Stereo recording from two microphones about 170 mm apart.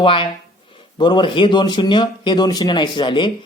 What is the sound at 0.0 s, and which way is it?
Speech, 30° left (ahead or behind).